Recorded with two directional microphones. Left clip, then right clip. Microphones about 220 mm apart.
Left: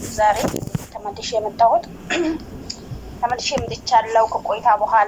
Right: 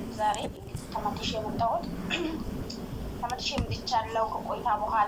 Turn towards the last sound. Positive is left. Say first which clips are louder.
# left 11 dB
turn(degrees=45)  # may be behind; listen again after turning